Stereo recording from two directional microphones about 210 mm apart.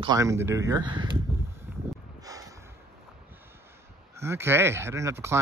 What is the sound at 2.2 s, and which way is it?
Snort, 15° right (ahead or behind).